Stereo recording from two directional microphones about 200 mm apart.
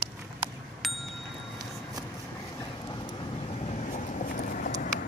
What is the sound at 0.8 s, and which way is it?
Bicycle bell, centre (ahead or behind).